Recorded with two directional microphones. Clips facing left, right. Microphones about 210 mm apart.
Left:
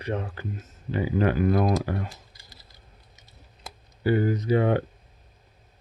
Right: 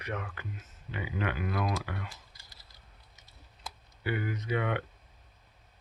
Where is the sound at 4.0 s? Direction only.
35° left (ahead or behind).